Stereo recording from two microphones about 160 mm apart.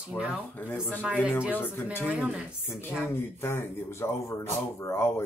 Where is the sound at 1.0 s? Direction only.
5° right (ahead or behind).